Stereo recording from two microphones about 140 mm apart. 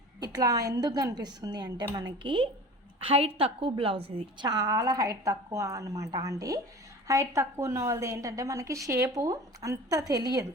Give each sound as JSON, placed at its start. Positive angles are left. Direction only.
{"t": 0.2, "sound": "a woman's voice", "side_deg": -25}
{"t": 4.4, "sound": "a woman's voice", "side_deg": -25}